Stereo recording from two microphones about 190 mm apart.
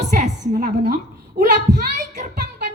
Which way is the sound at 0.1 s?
45° right (ahead or behind).